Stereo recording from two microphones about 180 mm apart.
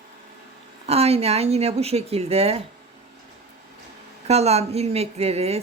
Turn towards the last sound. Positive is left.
turn(degrees=-35)  # may be behind; listen again after turning